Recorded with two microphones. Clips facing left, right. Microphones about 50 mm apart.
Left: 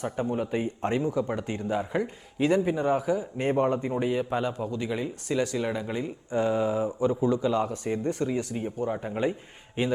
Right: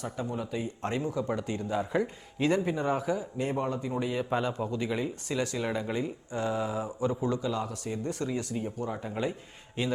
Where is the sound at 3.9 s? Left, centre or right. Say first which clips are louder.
Left 4 dB; centre.